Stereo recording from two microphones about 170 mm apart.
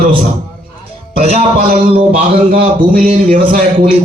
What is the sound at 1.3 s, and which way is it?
A man's voice, 50° right (ahead or behind).